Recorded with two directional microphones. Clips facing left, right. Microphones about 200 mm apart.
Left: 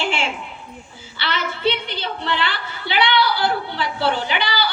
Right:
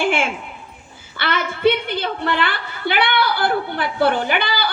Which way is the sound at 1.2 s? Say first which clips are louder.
Right 5 dB; 50° right (ahead or behind).